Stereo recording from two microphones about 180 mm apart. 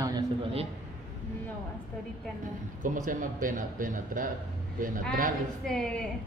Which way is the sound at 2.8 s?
45° right (ahead or behind).